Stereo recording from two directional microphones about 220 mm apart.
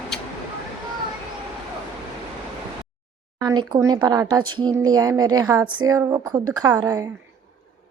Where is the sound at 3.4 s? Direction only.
20° right (ahead or behind).